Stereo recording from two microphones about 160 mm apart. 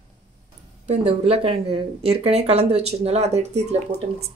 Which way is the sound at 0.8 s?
40° right (ahead or behind).